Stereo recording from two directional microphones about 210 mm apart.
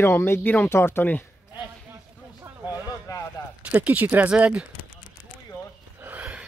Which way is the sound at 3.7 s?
10° right (ahead or behind).